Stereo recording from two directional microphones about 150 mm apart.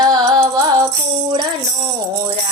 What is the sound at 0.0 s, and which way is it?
Music, 25° right (ahead or behind).